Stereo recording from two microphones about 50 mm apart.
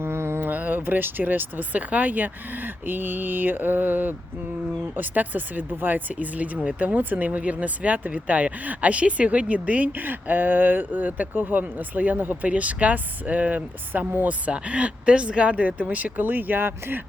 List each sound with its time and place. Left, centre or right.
0.0 s speech: right